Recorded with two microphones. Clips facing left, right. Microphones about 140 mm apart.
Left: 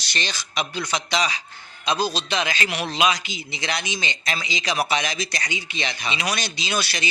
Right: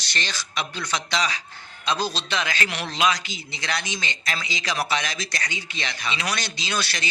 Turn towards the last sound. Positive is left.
turn(degrees=10)  # may be behind; listen again after turning